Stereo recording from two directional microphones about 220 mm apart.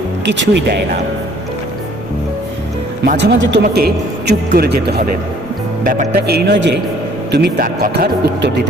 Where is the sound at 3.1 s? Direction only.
50° right (ahead or behind).